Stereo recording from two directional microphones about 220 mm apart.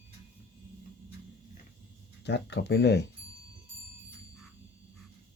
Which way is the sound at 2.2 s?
50° left (ahead or behind).